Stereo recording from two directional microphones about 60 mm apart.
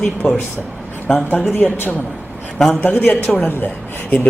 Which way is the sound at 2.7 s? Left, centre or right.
Left.